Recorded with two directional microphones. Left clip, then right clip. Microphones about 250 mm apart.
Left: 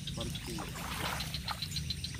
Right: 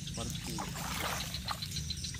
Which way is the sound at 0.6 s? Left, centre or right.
Right.